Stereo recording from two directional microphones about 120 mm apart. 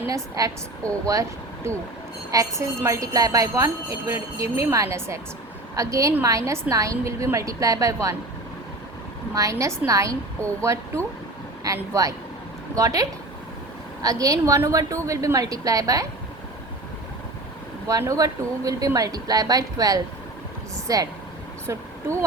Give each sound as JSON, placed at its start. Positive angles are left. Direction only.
{"t": 0.1, "sound": "jingle bell", "side_deg": -30}
{"t": 1.0, "sound": "speech", "side_deg": -25}
{"t": 2.3, "sound": "jingle bell", "side_deg": -25}
{"t": 9.3, "sound": "jingle bell", "side_deg": -25}
{"t": 17.8, "sound": "jingle bell", "side_deg": -25}